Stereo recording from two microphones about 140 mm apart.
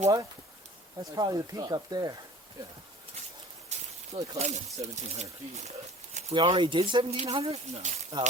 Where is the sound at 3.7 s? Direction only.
55° right (ahead or behind).